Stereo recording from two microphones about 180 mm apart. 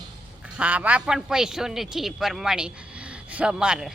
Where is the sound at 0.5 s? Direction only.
5° right (ahead or behind).